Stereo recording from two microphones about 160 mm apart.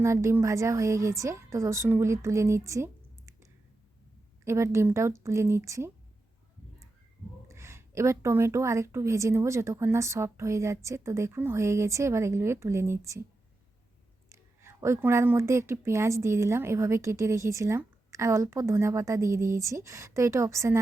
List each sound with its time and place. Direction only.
0.0 s a woman's voice: 15° right (ahead or behind)
7.4 s speech: 15° right (ahead or behind)
14.3 s speech: 20° right (ahead or behind)